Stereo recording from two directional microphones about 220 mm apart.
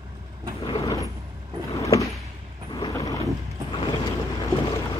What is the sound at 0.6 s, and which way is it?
Vehicle, 20° left (ahead or behind).